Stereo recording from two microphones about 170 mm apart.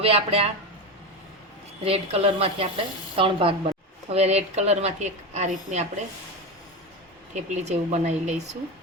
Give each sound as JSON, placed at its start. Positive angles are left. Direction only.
{"t": 0.0, "sound": "a woman's voice", "side_deg": -35}
{"t": 1.8, "sound": "a woman's voice", "side_deg": -35}
{"t": 7.3, "sound": "a woman's voice", "side_deg": -45}